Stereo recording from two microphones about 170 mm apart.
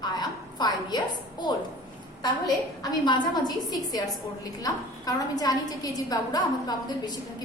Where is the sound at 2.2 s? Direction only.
25° left (ahead or behind).